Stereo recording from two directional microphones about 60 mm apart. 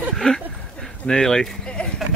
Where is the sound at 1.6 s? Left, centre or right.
Centre.